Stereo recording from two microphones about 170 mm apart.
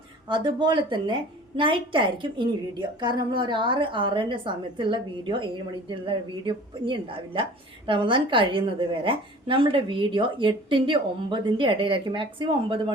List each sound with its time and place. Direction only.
0.3 s a woman's voice: 25° right (ahead or behind)